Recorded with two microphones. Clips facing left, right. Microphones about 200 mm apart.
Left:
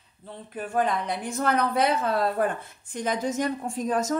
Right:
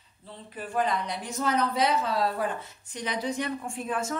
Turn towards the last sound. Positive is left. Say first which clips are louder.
# left 5 dB
turn(degrees=40)  # may be behind; listen again after turning